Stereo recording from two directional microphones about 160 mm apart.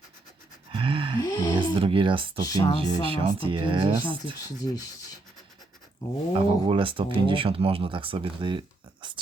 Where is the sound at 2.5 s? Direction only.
25° left (ahead or behind).